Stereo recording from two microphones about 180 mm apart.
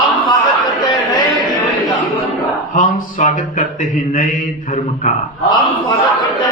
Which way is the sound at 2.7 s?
45° left (ahead or behind).